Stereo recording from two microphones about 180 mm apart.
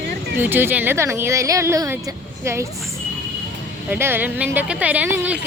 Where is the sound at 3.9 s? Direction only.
10° right (ahead or behind).